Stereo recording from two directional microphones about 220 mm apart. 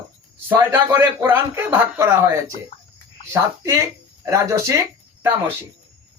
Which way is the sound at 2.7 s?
25° left (ahead or behind).